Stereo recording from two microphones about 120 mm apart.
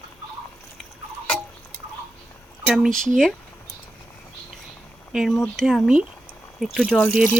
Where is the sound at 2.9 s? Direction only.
90° right.